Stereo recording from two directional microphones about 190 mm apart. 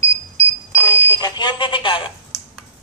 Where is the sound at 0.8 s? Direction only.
20° left (ahead or behind).